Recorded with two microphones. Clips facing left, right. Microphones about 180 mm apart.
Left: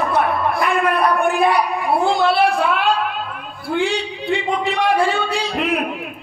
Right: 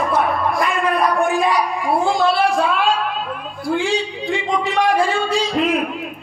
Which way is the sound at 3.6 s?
60° left (ahead or behind).